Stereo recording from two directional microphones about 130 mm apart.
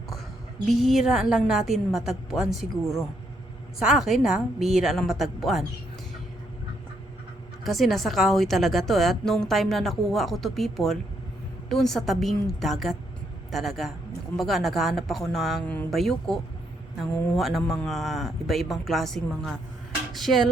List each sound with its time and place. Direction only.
0.7 s a woman's voice: centre (ahead or behind)
7.6 s a woman's voice: centre (ahead or behind)
15.6 s speech: 15° left (ahead or behind)
15.9 s a woman's voice: centre (ahead or behind)